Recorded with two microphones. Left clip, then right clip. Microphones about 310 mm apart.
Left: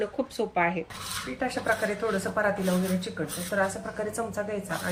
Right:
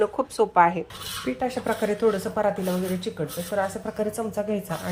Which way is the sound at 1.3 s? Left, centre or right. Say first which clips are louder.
Right 7 dB; right.